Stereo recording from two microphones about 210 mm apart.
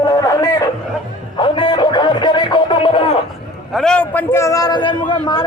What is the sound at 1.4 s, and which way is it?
Music, 20° left (ahead or behind).